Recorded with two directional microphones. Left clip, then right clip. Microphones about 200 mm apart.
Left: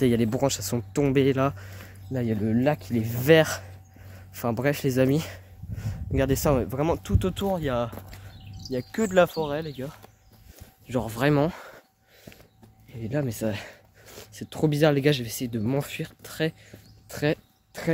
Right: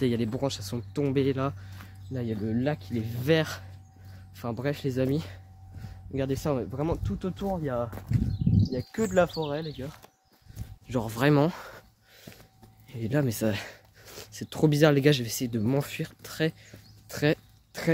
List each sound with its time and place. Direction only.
0.0 s speech: 35° left (ahead or behind); by 7.9 s 60° left (ahead or behind)
7.9 s speech: 20° left (ahead or behind)
8.6 s speech: 65° left (ahead or behind)
10.9 s speech: 5° left (ahead or behind); by 11.8 s 15° right (ahead or behind)
12.9 s speech: 25° right (ahead or behind)